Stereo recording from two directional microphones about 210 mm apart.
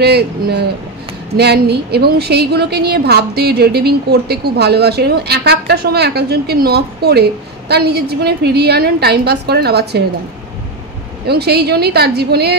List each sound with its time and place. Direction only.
0.0 s a woman's voice: 50° right (ahead or behind)
11.2 s a woman's voice: 50° right (ahead or behind)